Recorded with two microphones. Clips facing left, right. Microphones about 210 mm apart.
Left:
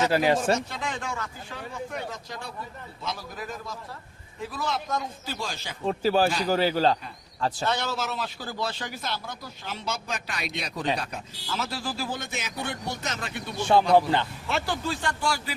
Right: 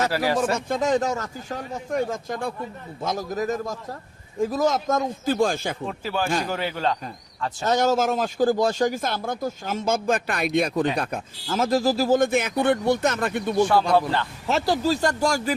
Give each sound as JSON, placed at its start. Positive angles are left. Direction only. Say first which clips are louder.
{"t": 0.1, "sound": "speech", "louder": "even", "side_deg": 20}
{"t": 0.5, "sound": "speech", "louder": "right 7 dB", "side_deg": -45}
{"t": 5.9, "sound": "speech", "louder": "left 5 dB", "side_deg": 35}
{"t": 7.6, "sound": "speech", "louder": "right 12 dB", "side_deg": -45}
{"t": 13.9, "sound": "speech", "louder": "left 1 dB", "side_deg": 20}
{"t": 14.4, "sound": "speech", "louder": "right 7 dB", "side_deg": -40}